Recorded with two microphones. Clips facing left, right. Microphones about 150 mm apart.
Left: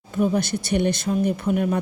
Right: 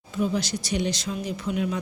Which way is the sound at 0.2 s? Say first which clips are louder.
Left 4 dB; 55° left (ahead or behind).